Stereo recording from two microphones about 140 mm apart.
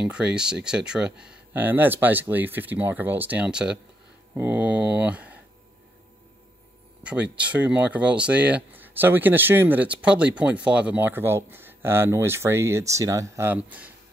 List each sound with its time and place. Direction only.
0.0 s speech: 5° right (ahead or behind)
7.0 s speech: 10° right (ahead or behind)